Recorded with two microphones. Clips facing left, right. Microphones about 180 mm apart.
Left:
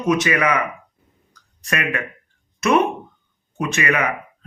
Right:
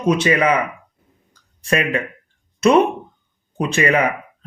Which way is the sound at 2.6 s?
30° right (ahead or behind).